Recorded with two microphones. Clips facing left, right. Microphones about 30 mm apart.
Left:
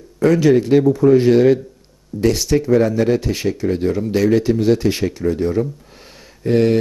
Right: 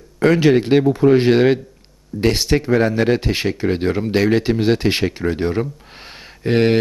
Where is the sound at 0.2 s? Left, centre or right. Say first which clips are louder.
Even; right.